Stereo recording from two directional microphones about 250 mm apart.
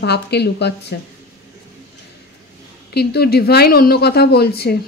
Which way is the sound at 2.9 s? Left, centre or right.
Left.